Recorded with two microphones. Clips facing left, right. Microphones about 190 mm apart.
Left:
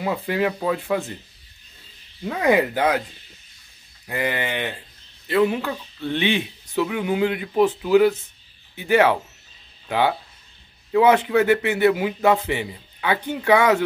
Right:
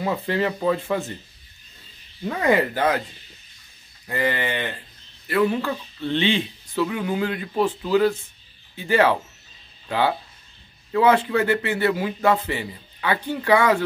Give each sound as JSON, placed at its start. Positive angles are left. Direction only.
{"t": 0.0, "sound": "speech", "side_deg": 10}
{"t": 2.2, "sound": "speech", "side_deg": 10}
{"t": 4.1, "sound": "speech", "side_deg": 15}